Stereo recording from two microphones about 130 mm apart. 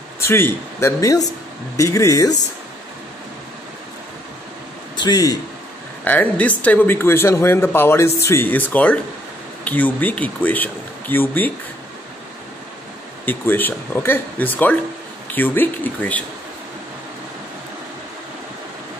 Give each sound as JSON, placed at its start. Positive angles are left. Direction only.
{"t": 0.2, "sound": "a man's voice", "side_deg": 20}
{"t": 4.9, "sound": "a man's voice", "side_deg": 30}
{"t": 6.0, "sound": "speech", "side_deg": 10}
{"t": 13.2, "sound": "speech", "side_deg": 15}